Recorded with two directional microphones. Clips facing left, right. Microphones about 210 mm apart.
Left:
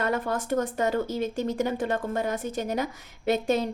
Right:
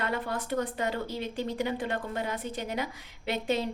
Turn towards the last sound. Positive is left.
turn(degrees=45)  # may be behind; listen again after turning